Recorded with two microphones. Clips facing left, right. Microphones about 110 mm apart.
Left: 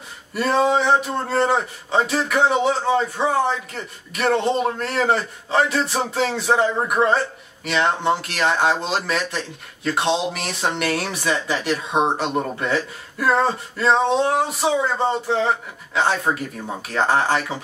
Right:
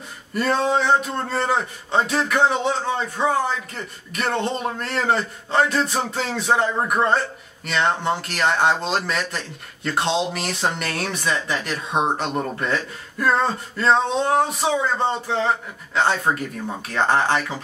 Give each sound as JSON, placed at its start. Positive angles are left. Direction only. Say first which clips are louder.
{"t": 0.3, "sound": "a man's voice", "louder": "left 2 dB", "side_deg": 5}